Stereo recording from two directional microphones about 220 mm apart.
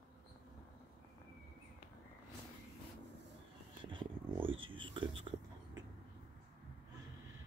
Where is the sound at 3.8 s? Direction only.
20° right (ahead or behind).